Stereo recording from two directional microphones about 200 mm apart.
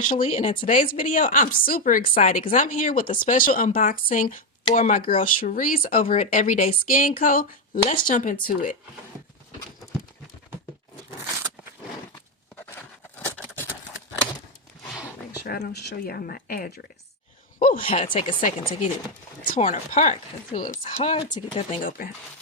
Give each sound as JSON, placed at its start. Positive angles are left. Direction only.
{"t": 0.1, "sound": "speech", "side_deg": 35}
{"t": 0.6, "sound": "speech", "side_deg": 40}
{"t": 12.7, "sound": "a sound", "side_deg": 10}
{"t": 15.4, "sound": "speech", "side_deg": 50}
{"t": 17.7, "sound": "speech", "side_deg": 30}
{"t": 18.3, "sound": "speech", "side_deg": 40}
{"t": 21.8, "sound": "speech", "side_deg": 45}